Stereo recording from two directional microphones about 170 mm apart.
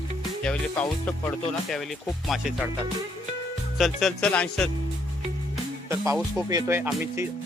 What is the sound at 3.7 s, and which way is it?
Speech, centre (ahead or behind).